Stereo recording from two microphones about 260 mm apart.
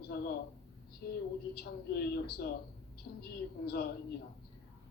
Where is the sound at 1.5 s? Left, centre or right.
Left.